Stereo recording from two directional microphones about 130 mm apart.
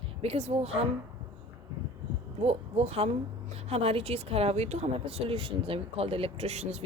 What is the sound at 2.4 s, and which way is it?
Speech, 55° right (ahead or behind).